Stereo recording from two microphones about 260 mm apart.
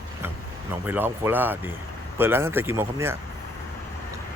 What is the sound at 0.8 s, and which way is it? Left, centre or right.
Speech, centre.